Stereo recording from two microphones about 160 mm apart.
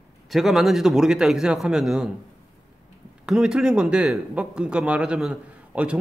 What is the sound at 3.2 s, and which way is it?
Speech, 5° right (ahead or behind).